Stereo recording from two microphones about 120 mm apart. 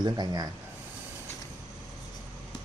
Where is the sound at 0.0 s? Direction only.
35° right (ahead or behind).